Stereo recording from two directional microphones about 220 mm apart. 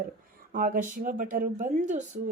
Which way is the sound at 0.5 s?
40° right (ahead or behind).